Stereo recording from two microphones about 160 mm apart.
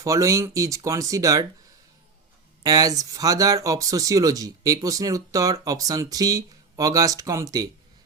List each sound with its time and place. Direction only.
0.0 s speech: 20° right (ahead or behind)
2.6 s speech: 20° right (ahead or behind)